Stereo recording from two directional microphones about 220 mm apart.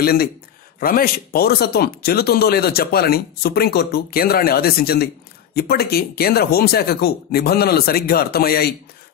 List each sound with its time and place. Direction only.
0.0 s speech: 45° left (ahead or behind)